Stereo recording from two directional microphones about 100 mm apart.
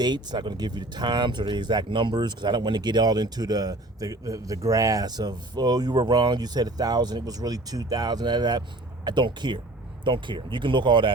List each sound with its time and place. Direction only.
0.0 s speech: 45° right (ahead or behind)